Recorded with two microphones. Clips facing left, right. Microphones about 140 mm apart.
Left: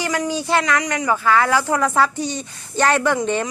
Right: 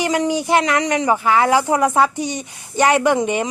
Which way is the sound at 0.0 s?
20° right (ahead or behind).